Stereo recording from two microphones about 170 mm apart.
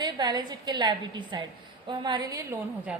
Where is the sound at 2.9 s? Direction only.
5° right (ahead or behind).